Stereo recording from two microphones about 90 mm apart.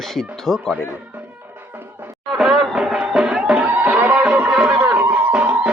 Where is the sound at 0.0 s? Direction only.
Centre (ahead or behind).